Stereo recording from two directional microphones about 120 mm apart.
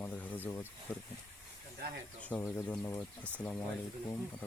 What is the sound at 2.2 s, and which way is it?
Speech, 15° left (ahead or behind).